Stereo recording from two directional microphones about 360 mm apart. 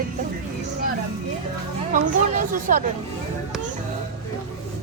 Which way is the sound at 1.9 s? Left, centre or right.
Right.